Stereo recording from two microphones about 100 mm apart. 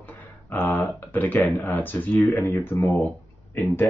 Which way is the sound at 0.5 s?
15° left (ahead or behind).